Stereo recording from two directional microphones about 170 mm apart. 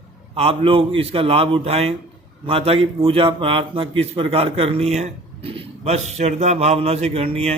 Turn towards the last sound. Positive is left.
turn(degrees=-35)  # may be behind; listen again after turning